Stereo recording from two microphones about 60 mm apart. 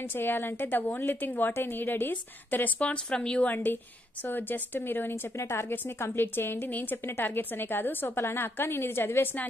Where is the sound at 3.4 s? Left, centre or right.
Left.